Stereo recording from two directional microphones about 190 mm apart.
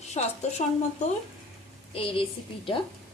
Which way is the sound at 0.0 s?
35° left (ahead or behind).